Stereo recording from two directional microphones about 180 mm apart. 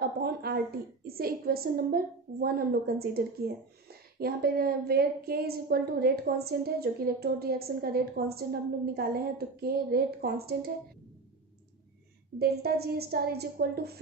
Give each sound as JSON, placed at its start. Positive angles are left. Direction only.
{"t": 0.0, "sound": "a sound", "side_deg": -60}
{"t": 1.0, "sound": "a woman's voice", "side_deg": -55}
{"t": 12.4, "sound": "a woman's voice", "side_deg": -60}